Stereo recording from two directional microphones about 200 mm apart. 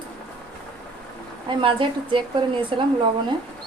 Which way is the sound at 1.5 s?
25° right (ahead or behind).